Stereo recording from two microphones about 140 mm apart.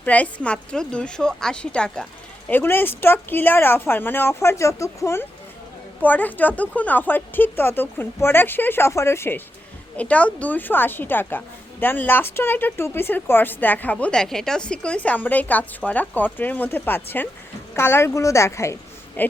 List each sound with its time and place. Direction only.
0.0 s a woman's voice: 10° left (ahead or behind)